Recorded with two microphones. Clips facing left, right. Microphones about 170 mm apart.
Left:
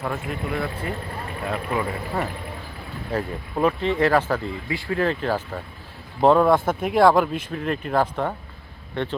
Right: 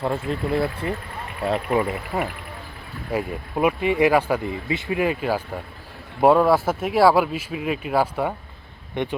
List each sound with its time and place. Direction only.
0.0 s speech: 30° right (ahead or behind)
3.1 s speech: 10° right (ahead or behind)